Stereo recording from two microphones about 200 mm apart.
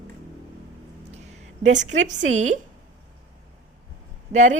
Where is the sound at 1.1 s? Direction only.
35° right (ahead or behind).